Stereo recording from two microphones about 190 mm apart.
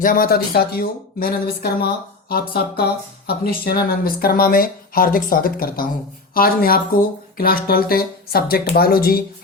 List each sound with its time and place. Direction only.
0.0 s speech: 50° left (ahead or behind)